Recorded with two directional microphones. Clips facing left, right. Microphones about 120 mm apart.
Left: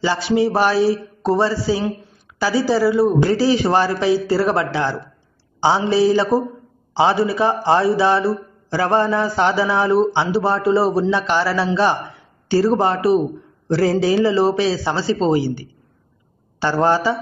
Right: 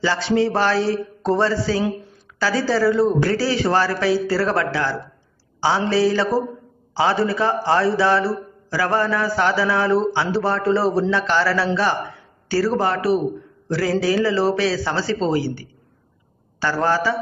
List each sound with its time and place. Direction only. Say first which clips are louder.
0.0 s a man's voice: left 1 dB; 15° left (ahead or behind)